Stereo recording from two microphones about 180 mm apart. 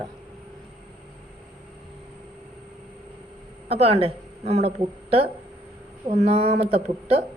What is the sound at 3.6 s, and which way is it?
A woman's voice, 35° right (ahead or behind).